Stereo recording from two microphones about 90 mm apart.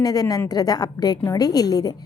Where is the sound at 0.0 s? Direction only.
45° left (ahead or behind).